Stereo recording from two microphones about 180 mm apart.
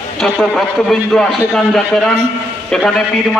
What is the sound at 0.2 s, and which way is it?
A man's voice, centre (ahead or behind).